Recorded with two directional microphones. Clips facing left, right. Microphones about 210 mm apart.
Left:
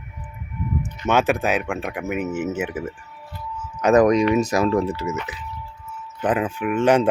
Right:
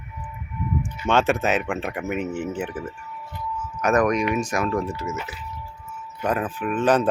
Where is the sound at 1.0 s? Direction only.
10° left (ahead or behind).